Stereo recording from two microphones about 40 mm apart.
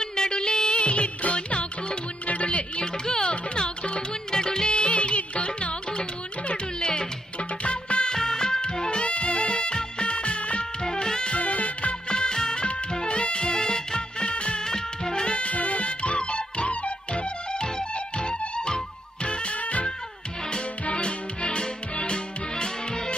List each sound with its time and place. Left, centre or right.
0.0 s music: centre
0.7 s music: left
8.2 s music: centre; by 10.7 s left
10.8 s music: centre
11.3 s music: left
12.1 s music: centre
14.7 s music: centre
15.2 s music: left